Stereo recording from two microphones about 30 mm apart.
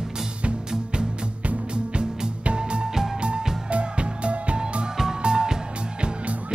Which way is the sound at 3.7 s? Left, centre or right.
Right.